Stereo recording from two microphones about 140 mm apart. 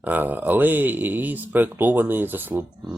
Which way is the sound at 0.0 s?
10° right (ahead or behind).